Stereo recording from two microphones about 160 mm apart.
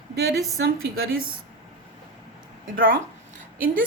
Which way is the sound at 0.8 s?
70° right (ahead or behind).